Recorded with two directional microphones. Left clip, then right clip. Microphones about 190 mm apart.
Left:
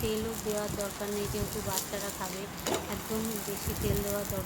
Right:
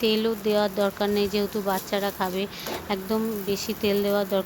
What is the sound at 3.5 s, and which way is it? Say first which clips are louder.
Speech: right 12 dB; 45° right (ahead or behind).